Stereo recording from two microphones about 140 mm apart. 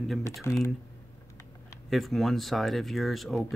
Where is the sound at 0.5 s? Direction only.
20° left (ahead or behind).